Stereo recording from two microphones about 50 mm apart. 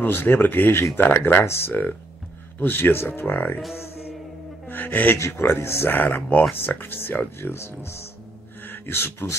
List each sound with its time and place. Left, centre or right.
0.0 s speech: left
1.4 s speech: left
1.7 s speech: left
4.6 s music: left
5.1 s speech: left
5.9 s speech: left
8.6 s speech: left